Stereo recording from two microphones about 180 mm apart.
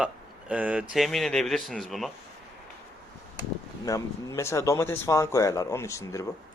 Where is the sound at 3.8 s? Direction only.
20° left (ahead or behind).